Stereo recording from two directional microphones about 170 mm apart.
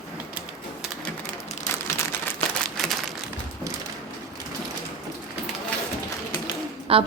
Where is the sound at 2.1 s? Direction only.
10° left (ahead or behind).